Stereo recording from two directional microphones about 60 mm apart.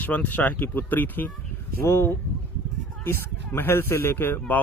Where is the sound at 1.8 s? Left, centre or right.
Left.